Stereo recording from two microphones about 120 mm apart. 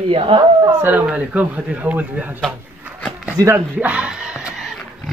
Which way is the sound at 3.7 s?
10° right (ahead or behind).